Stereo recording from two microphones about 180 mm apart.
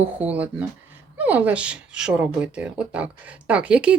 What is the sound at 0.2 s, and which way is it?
Speech, 10° right (ahead or behind).